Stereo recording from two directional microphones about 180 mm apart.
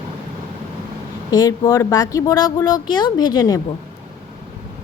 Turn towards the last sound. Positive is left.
turn(degrees=20)  # may be behind; listen again after turning